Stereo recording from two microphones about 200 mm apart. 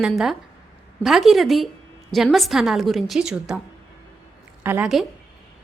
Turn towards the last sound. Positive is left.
turn(degrees=-5)  # may be behind; listen again after turning